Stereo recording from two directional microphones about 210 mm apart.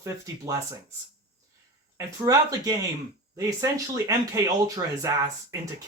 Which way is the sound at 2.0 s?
15° right (ahead or behind).